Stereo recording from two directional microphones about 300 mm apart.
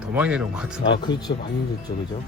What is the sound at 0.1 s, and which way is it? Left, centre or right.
Speech, centre.